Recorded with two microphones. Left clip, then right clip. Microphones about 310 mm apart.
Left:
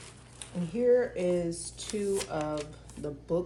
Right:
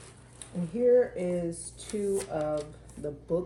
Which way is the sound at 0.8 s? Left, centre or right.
Centre.